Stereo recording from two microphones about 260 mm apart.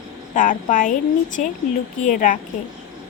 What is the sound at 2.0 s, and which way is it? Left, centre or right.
Speech, left.